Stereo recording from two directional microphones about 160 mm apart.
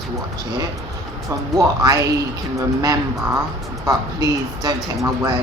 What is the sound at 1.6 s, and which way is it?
Speech, 20° right (ahead or behind).